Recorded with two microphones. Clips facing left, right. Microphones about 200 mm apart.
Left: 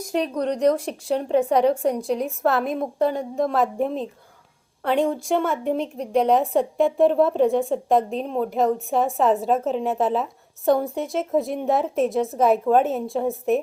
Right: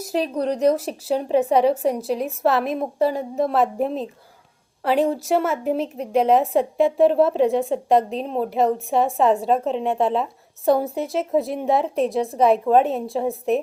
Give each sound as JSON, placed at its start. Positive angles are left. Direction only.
{"t": 0.2, "sound": "speech", "side_deg": -30}
{"t": 0.5, "sound": "a woman's voice", "side_deg": -5}